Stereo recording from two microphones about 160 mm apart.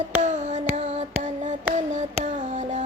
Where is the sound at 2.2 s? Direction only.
45° right (ahead or behind).